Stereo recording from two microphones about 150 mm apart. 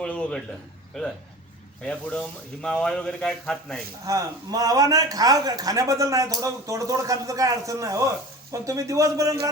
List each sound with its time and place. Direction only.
0.0 s a sound: 5° left (ahead or behind)
0.9 s speech: 5° left (ahead or behind)
4.0 s a man's voice: 20° right (ahead or behind)